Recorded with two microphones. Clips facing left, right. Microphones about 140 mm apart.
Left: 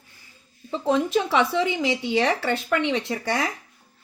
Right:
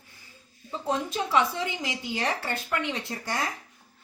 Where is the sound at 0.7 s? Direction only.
90° left.